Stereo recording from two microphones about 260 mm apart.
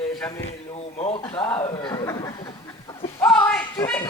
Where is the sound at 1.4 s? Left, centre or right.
Centre.